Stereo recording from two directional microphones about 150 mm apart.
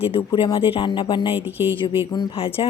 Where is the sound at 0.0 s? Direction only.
35° left (ahead or behind).